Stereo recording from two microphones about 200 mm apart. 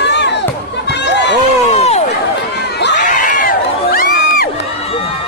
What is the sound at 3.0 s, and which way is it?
Crowd, 40° left (ahead or behind).